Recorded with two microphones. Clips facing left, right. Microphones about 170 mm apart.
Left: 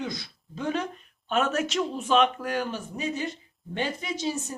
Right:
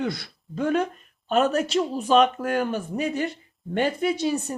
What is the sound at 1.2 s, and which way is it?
Speech, 35° right (ahead or behind).